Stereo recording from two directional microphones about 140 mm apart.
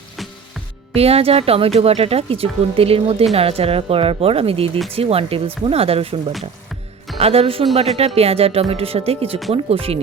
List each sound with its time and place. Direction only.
0.2 s music: centre (ahead or behind)
0.9 s speech: 45° right (ahead or behind)